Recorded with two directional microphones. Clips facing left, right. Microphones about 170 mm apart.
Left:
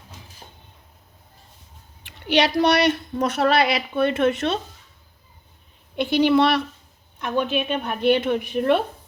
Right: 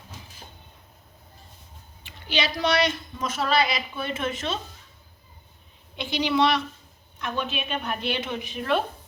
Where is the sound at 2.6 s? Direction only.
65° left (ahead or behind).